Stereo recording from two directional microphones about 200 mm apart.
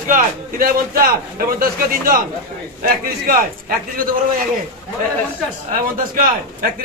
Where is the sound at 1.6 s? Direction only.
45° right (ahead or behind).